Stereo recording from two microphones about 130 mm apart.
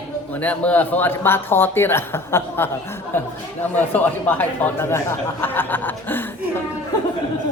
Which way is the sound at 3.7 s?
15° left (ahead or behind).